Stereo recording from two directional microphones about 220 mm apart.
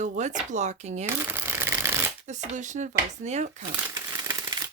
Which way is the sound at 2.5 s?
35° right (ahead or behind).